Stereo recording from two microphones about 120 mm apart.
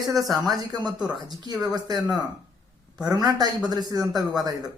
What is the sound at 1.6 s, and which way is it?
A woman's voice, 35° right (ahead or behind).